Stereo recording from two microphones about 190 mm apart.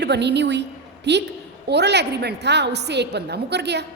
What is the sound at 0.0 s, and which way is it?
A woman's voice, 65° right (ahead or behind).